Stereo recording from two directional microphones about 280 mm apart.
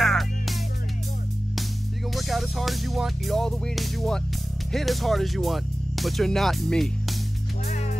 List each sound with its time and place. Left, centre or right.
0.0 s music: centre
2.0 s music: centre
4.7 s speech: centre
7.6 s music: left